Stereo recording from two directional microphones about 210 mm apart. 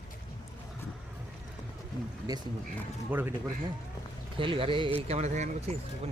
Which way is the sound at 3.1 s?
10° right (ahead or behind).